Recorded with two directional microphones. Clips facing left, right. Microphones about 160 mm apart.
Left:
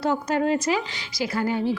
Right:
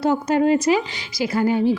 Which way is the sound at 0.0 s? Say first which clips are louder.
Right 5 dB; 15° right (ahead or behind).